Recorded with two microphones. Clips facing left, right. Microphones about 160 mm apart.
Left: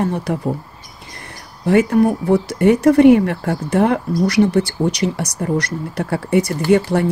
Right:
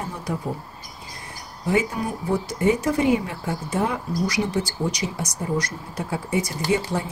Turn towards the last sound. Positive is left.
turn(degrees=70)  # may be behind; listen again after turning